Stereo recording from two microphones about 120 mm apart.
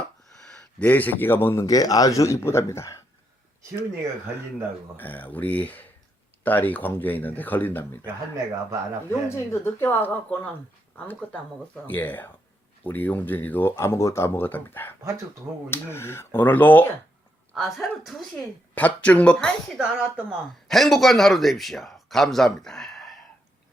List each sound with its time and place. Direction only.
0.4 s a man's voice: 10° left (ahead or behind)
1.6 s speech: 30° left (ahead or behind)
4.9 s speech: 15° left (ahead or behind)
9.0 s speech: 20° left (ahead or behind)
17.5 s speech: centre (ahead or behind)
18.7 s speech: 15° left (ahead or behind)
19.8 s speech: 10° right (ahead or behind)
20.7 s speech: centre (ahead or behind)